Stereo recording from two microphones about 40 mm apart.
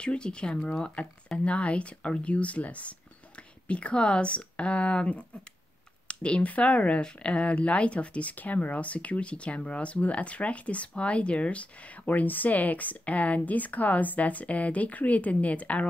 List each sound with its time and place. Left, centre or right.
0.0 s speech: left
12.1 s speech: left